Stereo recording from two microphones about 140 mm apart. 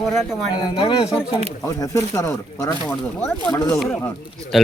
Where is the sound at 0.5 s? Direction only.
35° left (ahead or behind).